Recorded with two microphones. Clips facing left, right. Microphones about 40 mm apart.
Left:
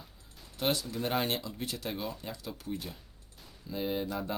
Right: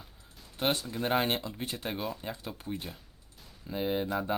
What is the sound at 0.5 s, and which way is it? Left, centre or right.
Speech, right.